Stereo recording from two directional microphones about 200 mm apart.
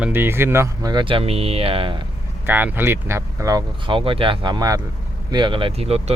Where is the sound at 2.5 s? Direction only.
10° right (ahead or behind).